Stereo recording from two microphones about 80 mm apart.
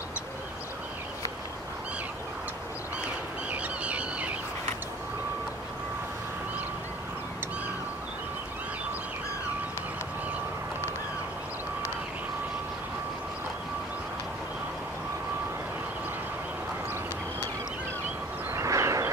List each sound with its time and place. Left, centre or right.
3.4 s bird: centre
18.5 s vehicle: right